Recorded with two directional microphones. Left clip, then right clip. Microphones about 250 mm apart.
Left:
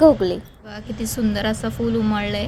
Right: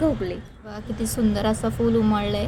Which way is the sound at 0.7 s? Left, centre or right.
Centre.